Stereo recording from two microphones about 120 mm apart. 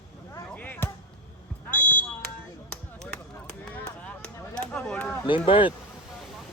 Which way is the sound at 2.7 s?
10° left (ahead or behind).